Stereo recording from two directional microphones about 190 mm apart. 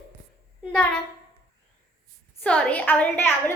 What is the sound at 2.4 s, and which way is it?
A woman's voice, 5° left (ahead or behind).